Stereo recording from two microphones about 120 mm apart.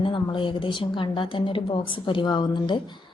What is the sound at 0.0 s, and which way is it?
A woman's voice, 45° left (ahead or behind).